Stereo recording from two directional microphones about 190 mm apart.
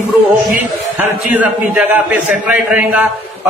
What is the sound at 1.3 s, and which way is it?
A man's voice, 10° right (ahead or behind).